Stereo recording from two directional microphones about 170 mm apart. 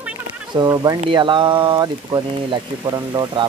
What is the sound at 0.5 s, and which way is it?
Speech, 25° right (ahead or behind).